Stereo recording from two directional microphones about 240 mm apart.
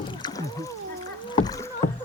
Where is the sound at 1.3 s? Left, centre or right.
Centre.